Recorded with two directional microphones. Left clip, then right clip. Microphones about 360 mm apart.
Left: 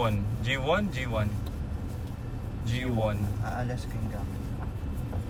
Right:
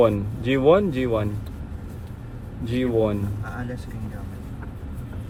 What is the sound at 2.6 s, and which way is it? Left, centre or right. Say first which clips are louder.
Speech: right 9 dB; centre.